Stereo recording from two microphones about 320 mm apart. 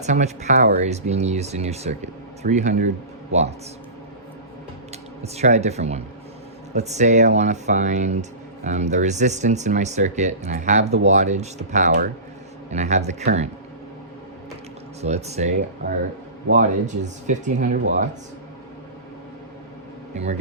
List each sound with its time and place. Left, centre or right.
0.0 s speech: right
5.2 s speech: centre
15.0 s speech: right